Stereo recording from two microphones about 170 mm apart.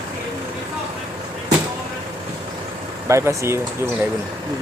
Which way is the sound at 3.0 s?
15° right (ahead or behind).